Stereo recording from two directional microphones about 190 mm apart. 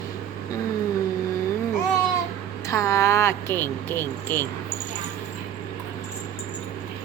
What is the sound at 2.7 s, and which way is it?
Speech, 15° left (ahead or behind).